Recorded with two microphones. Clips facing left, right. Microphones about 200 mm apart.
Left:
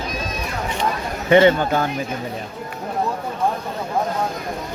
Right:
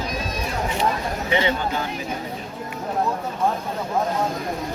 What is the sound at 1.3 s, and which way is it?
Speech, 55° left (ahead or behind).